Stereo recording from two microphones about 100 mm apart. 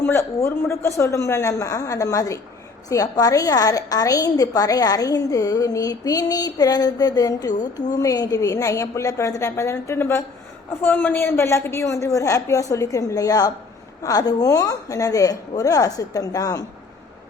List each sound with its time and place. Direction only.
0.0 s a man's voice: 25° left (ahead or behind)